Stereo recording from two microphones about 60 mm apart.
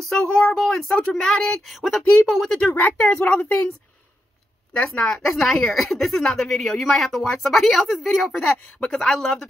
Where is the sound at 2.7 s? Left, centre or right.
Left.